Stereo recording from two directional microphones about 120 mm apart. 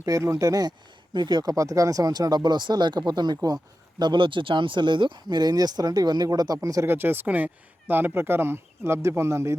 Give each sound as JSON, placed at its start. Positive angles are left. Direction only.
{"t": 0.0, "sound": "speech", "side_deg": -25}